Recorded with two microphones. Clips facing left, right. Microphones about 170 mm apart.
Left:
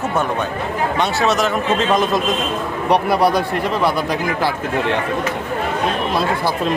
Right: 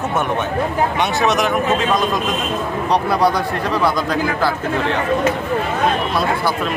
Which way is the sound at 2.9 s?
10° left (ahead or behind).